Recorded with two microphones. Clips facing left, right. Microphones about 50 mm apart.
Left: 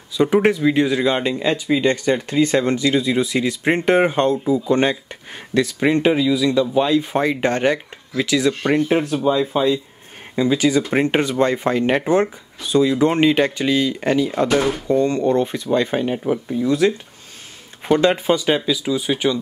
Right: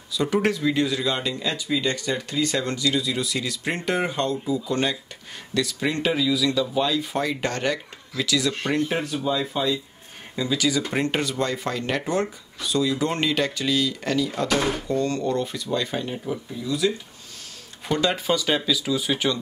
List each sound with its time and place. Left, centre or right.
0.2 s speech: left
17.8 s speech: left